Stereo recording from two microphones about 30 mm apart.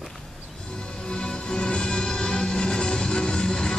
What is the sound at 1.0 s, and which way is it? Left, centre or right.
Music, left.